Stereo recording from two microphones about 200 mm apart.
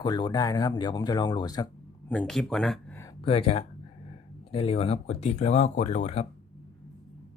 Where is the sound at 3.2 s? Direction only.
30° left (ahead or behind).